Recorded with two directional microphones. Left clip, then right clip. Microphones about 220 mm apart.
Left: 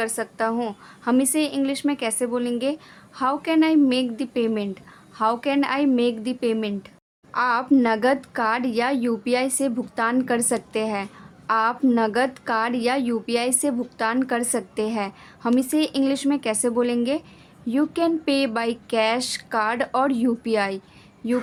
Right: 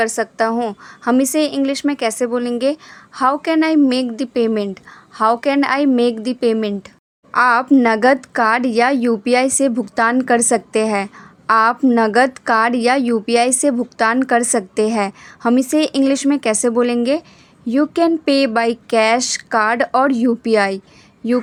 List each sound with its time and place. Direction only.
0.0 s a woman's voice: 25° right (ahead or behind)